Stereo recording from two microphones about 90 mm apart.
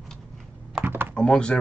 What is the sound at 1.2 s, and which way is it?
Speech, 10° left (ahead or behind).